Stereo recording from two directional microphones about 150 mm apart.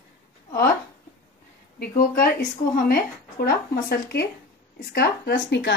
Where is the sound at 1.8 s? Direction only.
75° left (ahead or behind).